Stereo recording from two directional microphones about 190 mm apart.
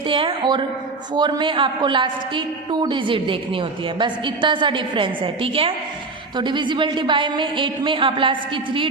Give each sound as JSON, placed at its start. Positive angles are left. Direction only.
{"t": 0.1, "sound": "a woman's voice", "side_deg": -25}